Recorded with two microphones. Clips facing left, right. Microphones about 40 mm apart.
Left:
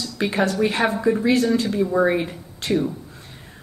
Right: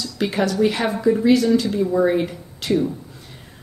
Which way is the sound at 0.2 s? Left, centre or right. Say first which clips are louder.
Right 1 dB; left.